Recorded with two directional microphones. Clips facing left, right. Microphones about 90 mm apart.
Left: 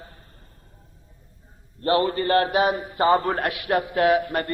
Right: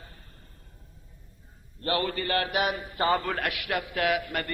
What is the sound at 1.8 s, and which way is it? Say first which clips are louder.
A man's voice: left 7 dB; 30° left (ahead or behind).